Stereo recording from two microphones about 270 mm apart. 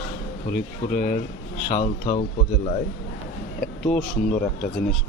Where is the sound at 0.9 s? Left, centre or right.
Left.